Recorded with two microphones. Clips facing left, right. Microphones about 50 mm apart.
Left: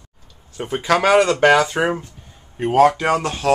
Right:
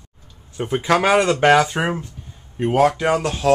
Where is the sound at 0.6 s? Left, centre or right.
Centre.